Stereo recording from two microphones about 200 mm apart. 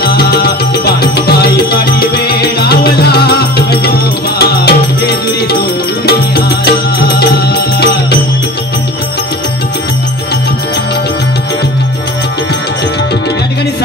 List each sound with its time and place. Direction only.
0.0 s music: 55° left (ahead or behind)